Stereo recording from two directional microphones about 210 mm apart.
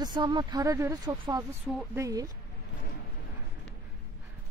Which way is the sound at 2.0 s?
15° right (ahead or behind).